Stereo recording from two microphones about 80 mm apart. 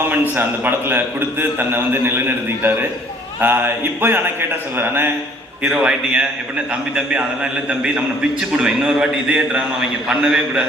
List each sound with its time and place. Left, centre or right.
0.1 s a man's voice: right
3.4 s a man's voice: right
5.6 s a man's voice: centre
7.7 s a man's voice: centre